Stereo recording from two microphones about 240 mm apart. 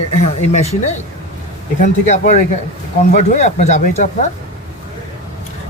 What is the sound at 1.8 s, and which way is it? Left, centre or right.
Speech, left.